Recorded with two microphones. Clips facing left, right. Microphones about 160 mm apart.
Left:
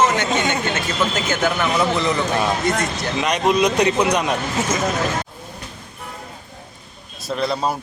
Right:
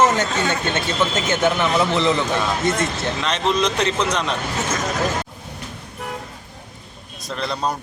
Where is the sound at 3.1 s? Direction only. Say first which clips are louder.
Left 4 dB; 15° left (ahead or behind).